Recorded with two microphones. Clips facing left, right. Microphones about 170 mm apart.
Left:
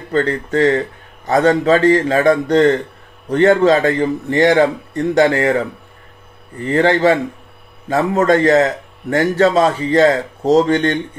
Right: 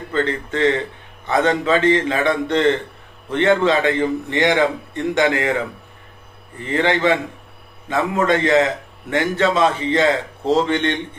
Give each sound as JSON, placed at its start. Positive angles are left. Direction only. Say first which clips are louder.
{"t": 0.1, "sound": "a man's voice", "louder": "left 5 dB", "side_deg": 40}
{"t": 6.6, "sound": "a man's voice", "louder": "left 5 dB", "side_deg": 40}